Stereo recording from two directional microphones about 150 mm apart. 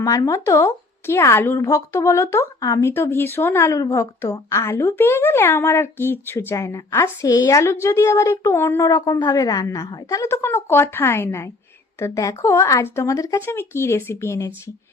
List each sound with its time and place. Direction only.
0.0 s a woman's voice: 20° left (ahead or behind)